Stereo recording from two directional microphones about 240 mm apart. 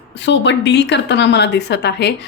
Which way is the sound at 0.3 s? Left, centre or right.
Left.